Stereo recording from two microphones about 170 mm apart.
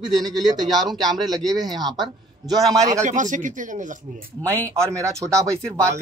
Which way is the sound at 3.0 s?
50° right (ahead or behind).